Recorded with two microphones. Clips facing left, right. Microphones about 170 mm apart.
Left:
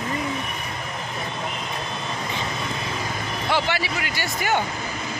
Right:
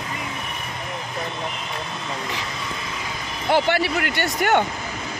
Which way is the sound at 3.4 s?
55° right (ahead or behind).